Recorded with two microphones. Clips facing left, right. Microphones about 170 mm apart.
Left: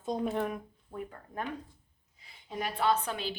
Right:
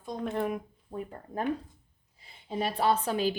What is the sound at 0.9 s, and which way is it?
Speech, 25° right (ahead or behind).